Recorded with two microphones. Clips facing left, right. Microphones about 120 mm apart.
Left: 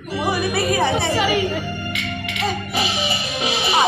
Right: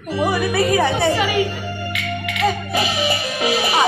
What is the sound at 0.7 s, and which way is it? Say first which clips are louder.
Speech: right 1 dB; 30° left (ahead or behind).